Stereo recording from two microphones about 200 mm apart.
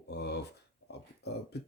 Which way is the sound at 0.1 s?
55° left (ahead or behind).